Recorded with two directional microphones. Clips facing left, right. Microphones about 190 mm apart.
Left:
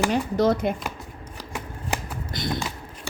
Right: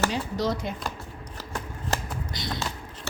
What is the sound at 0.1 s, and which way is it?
Speech, 55° left (ahead or behind).